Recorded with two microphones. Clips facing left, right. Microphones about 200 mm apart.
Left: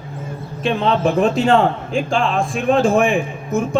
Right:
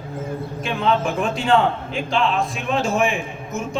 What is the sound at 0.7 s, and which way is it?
A man's voice, 35° left (ahead or behind).